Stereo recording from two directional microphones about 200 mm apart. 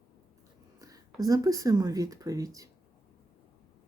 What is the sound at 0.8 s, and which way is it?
Speech, 15° right (ahead or behind).